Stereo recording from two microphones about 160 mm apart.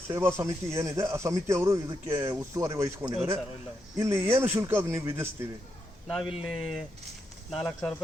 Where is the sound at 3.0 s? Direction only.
40° right (ahead or behind).